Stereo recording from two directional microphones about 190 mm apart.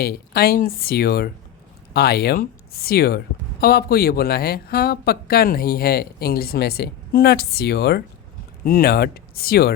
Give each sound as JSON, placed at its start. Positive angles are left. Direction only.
{"t": 0.0, "sound": "speech", "side_deg": 55}